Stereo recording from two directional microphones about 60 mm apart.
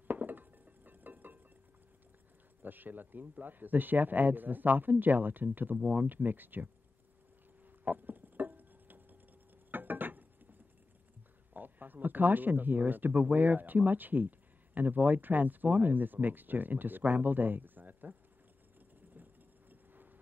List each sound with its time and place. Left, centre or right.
0.1 s music: right
2.6 s a man's voice: right
7.8 s music: right
9.7 s a sound: right
11.5 s speech: right
19.2 s vehicle: right
19.7 s a sound: right